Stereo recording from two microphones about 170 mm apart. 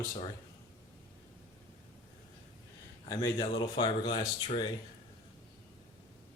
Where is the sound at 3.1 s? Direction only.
25° left (ahead or behind).